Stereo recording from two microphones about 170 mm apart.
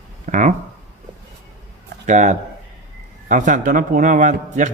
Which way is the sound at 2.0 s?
45° right (ahead or behind).